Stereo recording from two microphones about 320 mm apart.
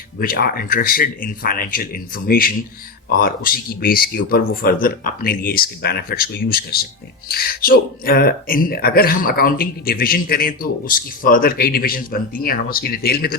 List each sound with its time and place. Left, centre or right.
0.2 s speech: left